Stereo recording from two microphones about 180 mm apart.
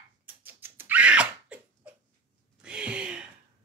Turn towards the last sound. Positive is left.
turn(degrees=-5)  # may be behind; listen again after turning